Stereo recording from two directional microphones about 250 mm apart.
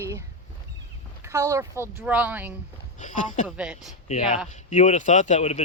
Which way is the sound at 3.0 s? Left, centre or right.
Left.